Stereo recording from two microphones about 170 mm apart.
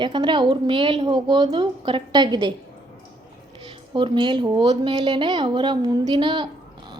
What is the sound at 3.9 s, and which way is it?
A woman's voice, 30° right (ahead or behind).